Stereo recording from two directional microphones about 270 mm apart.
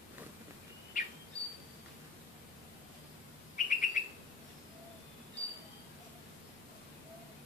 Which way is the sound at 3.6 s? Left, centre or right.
Left.